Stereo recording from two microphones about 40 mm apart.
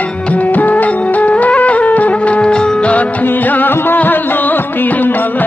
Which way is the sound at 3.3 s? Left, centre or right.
Left.